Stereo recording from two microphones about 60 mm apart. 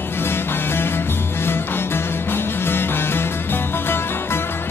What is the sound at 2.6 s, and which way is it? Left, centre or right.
Music, left.